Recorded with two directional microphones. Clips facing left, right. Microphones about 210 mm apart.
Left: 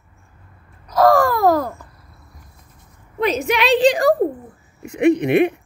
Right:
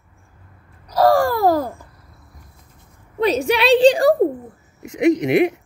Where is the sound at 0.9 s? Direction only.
30° right (ahead or behind).